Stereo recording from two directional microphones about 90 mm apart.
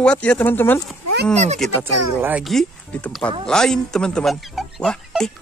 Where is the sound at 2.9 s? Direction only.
15° left (ahead or behind).